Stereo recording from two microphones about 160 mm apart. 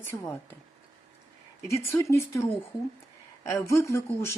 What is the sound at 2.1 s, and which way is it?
Speech, 15° left (ahead or behind).